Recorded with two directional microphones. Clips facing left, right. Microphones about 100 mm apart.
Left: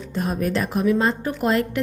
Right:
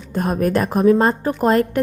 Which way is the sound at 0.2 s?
50° right (ahead or behind).